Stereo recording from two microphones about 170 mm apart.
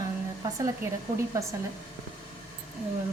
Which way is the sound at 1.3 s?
20° right (ahead or behind).